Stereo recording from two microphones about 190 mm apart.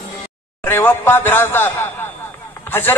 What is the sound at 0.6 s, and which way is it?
A man's voice, 10° left (ahead or behind).